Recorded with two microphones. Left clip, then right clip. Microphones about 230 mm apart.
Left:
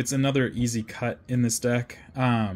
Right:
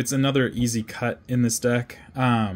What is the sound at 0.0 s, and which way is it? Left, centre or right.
Speech, centre.